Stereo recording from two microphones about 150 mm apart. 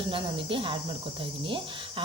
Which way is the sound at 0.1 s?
35° right (ahead or behind).